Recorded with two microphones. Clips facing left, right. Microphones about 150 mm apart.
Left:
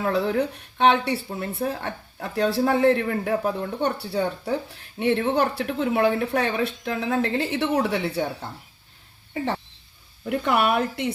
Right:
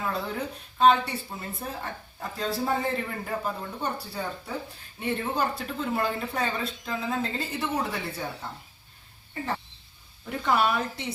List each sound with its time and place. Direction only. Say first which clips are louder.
0.0 s speech: left 8 dB; 70° left (ahead or behind)
10.2 s speech: left 3 dB; 65° left (ahead or behind)